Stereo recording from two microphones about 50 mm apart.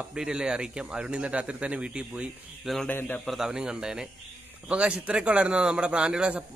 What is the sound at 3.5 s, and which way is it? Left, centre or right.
A man's voice, centre.